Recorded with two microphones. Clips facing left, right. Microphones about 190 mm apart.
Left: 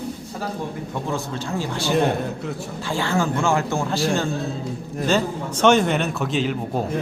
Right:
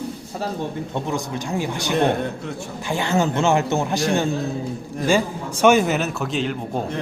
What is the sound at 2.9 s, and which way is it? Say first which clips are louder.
A man's voice: right 2 dB; 20° right (ahead or behind).